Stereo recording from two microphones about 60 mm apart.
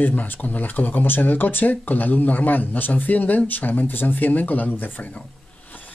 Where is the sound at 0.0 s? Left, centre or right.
Left.